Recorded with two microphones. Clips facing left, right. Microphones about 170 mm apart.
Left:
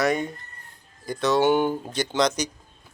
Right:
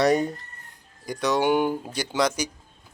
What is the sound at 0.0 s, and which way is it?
Speech, 35° right (ahead or behind).